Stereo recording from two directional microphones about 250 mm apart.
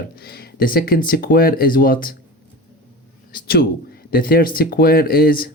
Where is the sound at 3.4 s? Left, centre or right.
Left.